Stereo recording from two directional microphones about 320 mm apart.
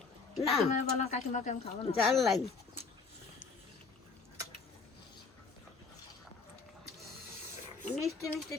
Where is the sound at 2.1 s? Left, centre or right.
Centre.